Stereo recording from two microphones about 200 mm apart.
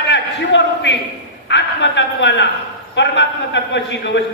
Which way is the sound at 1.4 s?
60° left (ahead or behind).